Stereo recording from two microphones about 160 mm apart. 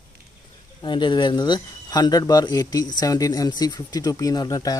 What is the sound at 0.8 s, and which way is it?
Speech, 30° left (ahead or behind).